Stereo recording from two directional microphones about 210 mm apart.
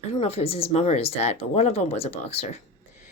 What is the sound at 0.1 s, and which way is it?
Speech, 25° left (ahead or behind).